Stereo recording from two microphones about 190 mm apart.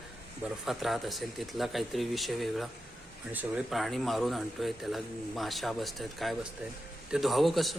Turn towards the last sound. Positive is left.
turn(degrees=0)  # may be behind; listen again after turning